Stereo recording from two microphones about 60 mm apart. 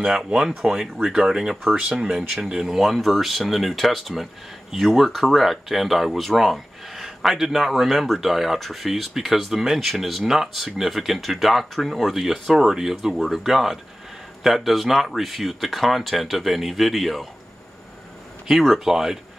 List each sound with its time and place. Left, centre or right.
0.1 s speech: centre
2.3 s speech: centre
18.9 s speech: centre